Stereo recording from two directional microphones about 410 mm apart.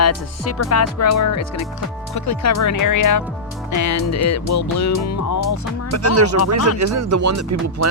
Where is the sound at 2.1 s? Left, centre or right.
Left.